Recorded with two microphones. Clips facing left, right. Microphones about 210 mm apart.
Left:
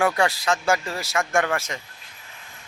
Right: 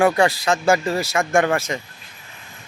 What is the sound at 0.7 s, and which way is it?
Speech, 30° right (ahead or behind).